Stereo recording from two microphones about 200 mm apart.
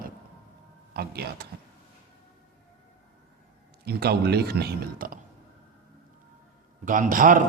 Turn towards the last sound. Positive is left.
turn(degrees=-40)  # may be behind; listen again after turning